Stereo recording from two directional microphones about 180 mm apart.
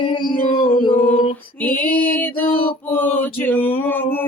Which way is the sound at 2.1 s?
10° left (ahead or behind).